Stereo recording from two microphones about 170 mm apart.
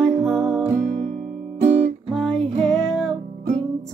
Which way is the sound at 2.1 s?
5° left (ahead or behind).